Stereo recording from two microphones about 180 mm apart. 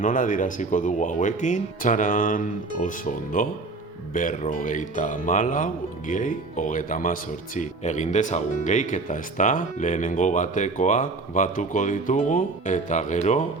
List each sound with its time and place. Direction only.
0.0 s speech: 45° left (ahead or behind)